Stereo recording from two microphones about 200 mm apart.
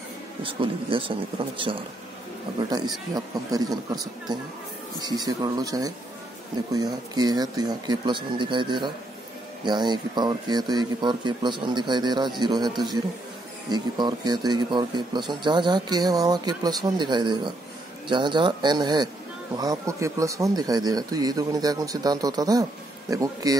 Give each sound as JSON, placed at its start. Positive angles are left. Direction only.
{"t": 0.4, "sound": "speech", "side_deg": -25}
{"t": 2.7, "sound": "speech", "side_deg": -20}
{"t": 5.0, "sound": "speech", "side_deg": -20}